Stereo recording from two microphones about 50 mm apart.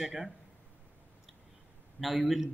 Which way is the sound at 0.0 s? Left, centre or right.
Centre.